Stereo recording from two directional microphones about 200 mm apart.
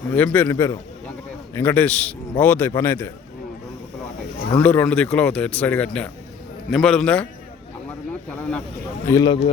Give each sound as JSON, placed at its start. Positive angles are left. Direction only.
{"t": 0.1, "sound": "speech", "side_deg": 10}
{"t": 4.5, "sound": "a man's voice", "side_deg": 10}
{"t": 8.3, "sound": "a man's voice", "side_deg": 5}
{"t": 9.0, "sound": "speech", "side_deg": 20}